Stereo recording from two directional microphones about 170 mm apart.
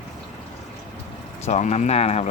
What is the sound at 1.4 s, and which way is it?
Speech, 40° left (ahead or behind).